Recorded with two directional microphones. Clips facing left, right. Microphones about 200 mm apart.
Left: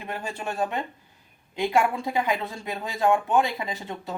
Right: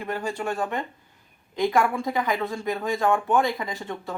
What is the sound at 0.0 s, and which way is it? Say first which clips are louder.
Speech: right 4 dB; 20° left (ahead or behind).